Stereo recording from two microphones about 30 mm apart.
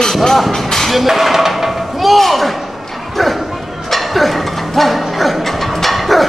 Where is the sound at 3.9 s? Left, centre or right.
Centre.